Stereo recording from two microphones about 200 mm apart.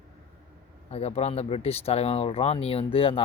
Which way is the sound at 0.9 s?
30° left (ahead or behind).